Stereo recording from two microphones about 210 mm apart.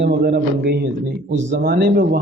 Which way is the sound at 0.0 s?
55° right (ahead or behind).